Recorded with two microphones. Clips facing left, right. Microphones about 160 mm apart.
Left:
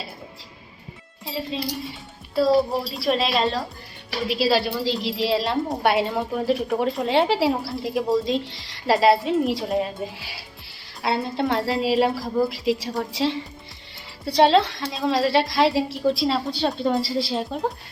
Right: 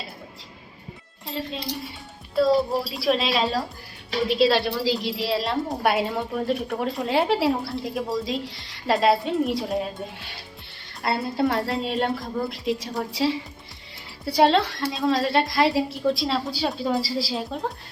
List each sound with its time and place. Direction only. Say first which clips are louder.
1.2 s speech: left 3 dB; 5° left (ahead or behind)